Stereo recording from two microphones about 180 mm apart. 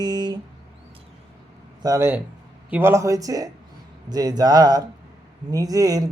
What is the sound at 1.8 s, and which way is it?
Speech, 15° right (ahead or behind).